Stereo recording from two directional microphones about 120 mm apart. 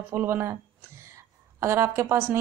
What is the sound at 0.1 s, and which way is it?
A woman's voice, 20° right (ahead or behind).